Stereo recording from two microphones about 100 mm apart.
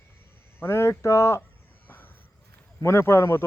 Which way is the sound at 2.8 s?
25° left (ahead or behind).